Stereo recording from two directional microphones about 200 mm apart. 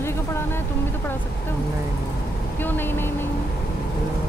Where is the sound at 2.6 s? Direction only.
10° left (ahead or behind).